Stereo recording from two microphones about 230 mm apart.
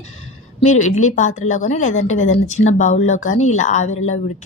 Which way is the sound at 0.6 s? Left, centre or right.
Left.